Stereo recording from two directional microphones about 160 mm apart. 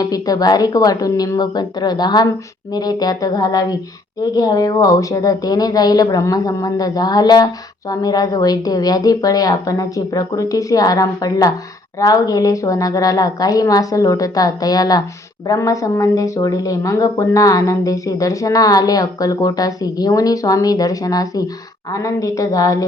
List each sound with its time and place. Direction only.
0.0 s speech: 25° left (ahead or behind)